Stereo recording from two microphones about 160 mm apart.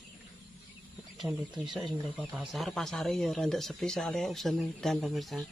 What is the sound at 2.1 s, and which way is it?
Speech, 5° right (ahead or behind).